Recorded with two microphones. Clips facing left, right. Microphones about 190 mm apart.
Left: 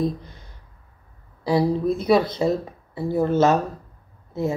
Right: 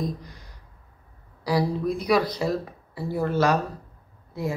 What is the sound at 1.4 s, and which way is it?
Speech, 25° left (ahead or behind).